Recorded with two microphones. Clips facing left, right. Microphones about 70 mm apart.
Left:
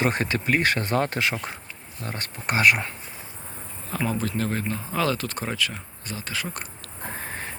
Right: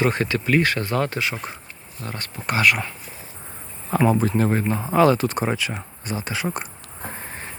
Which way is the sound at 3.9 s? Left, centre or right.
Right.